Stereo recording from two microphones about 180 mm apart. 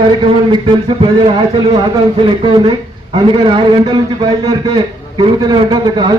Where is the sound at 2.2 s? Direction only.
25° right (ahead or behind).